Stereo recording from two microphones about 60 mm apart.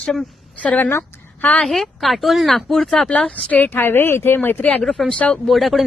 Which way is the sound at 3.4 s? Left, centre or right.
Left.